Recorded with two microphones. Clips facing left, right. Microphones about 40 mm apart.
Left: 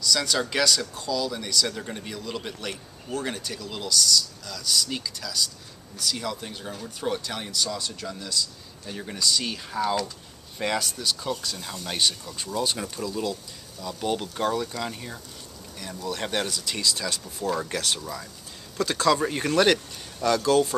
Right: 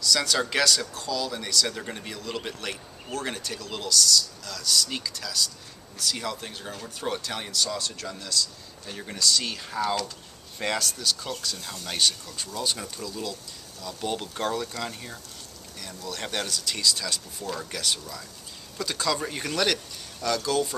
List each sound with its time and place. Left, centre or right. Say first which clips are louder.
0.0 s speech: even; centre